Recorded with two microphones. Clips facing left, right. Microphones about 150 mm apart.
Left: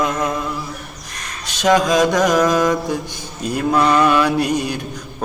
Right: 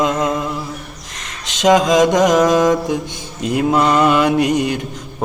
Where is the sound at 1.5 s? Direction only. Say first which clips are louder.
Right 3 dB; 20° right (ahead or behind).